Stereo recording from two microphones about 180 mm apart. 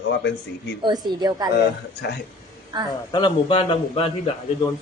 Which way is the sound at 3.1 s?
25° left (ahead or behind).